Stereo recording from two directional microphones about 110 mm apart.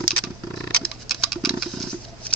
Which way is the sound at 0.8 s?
Centre (ahead or behind).